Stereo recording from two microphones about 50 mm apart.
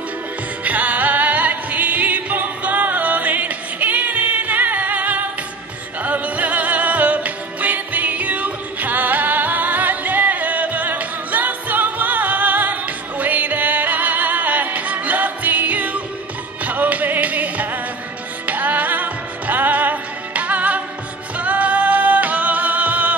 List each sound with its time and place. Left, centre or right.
0.7 s music: right